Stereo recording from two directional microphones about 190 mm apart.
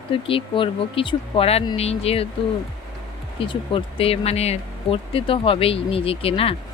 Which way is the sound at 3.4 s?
25° left (ahead or behind).